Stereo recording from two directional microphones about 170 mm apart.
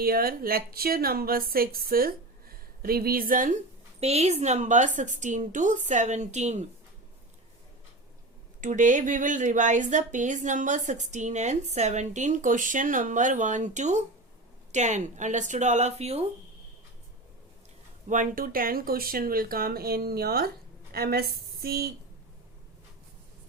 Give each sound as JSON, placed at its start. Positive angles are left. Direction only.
{"t": 0.0, "sound": "a woman's voice", "side_deg": -60}
{"t": 4.0, "sound": "speech", "side_deg": -40}
{"t": 8.6, "sound": "speech", "side_deg": -45}
{"t": 18.1, "sound": "a woman's voice", "side_deg": -50}